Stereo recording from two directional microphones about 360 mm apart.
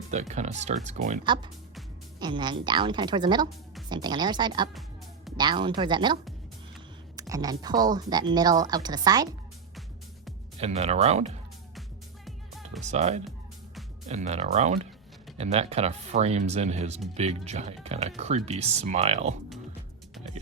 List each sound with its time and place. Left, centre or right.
0.1 s speech: centre
7.2 s speech: centre
10.6 s speech: centre
12.8 s speech: centre